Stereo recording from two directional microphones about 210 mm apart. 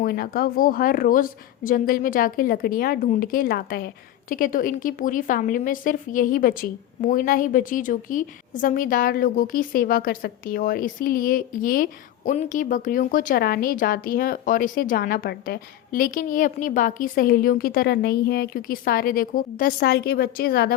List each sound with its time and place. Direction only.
0.0 s speech: 45° left (ahead or behind)